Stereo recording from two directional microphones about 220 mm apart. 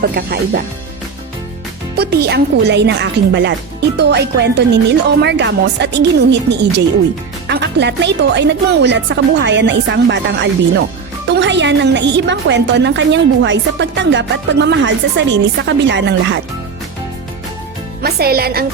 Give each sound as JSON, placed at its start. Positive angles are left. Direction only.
{"t": 0.1, "sound": "a woman's voice", "side_deg": -45}
{"t": 2.0, "sound": "a woman's voice", "side_deg": -45}
{"t": 18.0, "sound": "a woman's voice", "side_deg": -45}